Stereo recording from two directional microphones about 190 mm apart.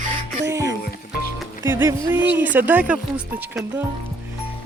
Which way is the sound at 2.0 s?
10° right (ahead or behind).